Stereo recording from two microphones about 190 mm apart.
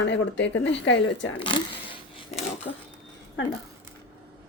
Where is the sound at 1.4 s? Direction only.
25° left (ahead or behind).